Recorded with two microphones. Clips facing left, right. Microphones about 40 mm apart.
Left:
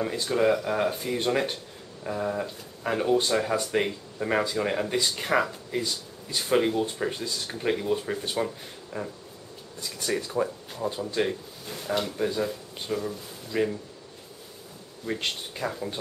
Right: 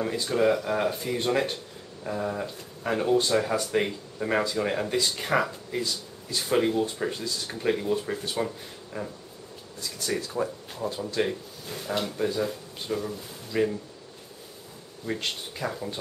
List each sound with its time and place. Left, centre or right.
0.0 s speech: centre
9.8 s speech: left
10.4 s speech: centre
10.8 s speech: centre
15.5 s speech: centre